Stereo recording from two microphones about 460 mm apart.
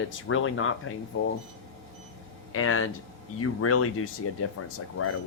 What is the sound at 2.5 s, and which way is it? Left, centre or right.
Speech, left.